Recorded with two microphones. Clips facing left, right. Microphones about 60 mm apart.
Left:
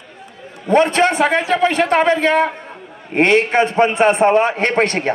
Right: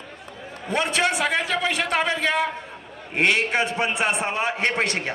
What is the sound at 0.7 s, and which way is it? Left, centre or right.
A man's voice, left.